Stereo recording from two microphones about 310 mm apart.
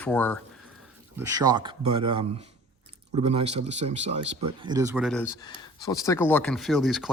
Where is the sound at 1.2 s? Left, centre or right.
Centre.